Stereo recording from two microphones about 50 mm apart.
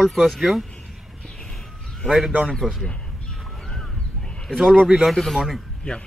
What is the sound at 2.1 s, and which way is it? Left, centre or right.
Speech, centre.